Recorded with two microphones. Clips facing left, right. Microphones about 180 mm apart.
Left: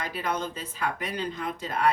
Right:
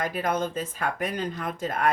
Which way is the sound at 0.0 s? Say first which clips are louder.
Right 4 dB; 50° right (ahead or behind).